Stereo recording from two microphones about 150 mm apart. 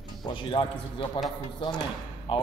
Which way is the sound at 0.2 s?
35° left (ahead or behind).